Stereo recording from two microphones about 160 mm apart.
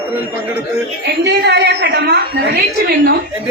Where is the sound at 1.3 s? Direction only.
90° right; by 3.1 s 75° right (ahead or behind).